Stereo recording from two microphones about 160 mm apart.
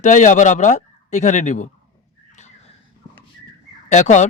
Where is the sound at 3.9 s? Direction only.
50° left (ahead or behind).